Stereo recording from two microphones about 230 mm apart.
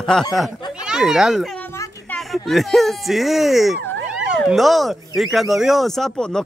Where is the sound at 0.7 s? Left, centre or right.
Centre.